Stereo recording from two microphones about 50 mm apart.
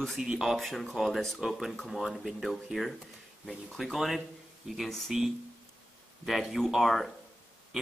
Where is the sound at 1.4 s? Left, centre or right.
Centre.